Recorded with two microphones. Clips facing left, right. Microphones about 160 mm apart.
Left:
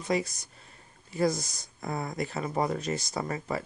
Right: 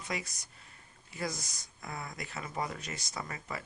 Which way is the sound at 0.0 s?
30° left (ahead or behind).